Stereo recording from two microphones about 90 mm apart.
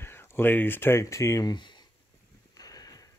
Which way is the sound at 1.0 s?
35° left (ahead or behind).